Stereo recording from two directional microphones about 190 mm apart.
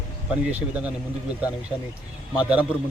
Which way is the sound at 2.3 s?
5° right (ahead or behind).